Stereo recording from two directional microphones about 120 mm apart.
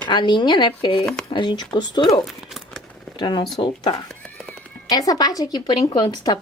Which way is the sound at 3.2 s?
40° left (ahead or behind).